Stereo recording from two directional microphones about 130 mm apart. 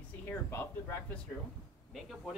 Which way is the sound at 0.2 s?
20° left (ahead or behind).